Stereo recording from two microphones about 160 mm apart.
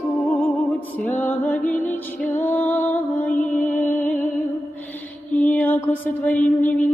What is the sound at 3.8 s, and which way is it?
Music, 10° left (ahead or behind).